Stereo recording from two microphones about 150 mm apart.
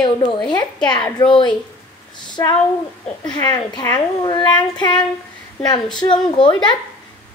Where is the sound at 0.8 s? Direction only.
30° left (ahead or behind).